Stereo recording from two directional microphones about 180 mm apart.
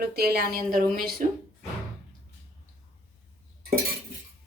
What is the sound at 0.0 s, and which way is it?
A woman's voice, 60° right (ahead or behind).